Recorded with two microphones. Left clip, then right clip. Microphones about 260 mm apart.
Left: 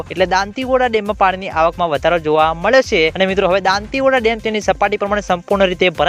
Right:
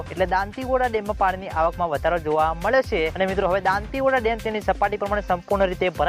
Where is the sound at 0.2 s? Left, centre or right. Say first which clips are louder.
Left 7 dB; left.